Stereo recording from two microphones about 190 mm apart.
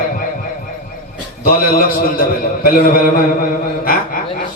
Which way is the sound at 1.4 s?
50° left (ahead or behind).